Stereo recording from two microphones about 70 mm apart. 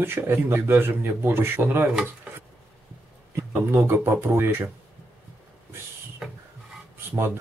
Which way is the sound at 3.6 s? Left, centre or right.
Right.